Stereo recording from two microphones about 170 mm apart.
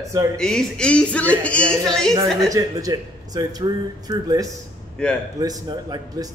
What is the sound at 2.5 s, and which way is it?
A man's voice, 20° right (ahead or behind).